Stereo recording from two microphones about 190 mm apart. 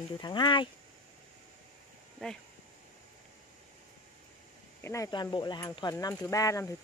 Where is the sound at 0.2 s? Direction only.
25° left (ahead or behind).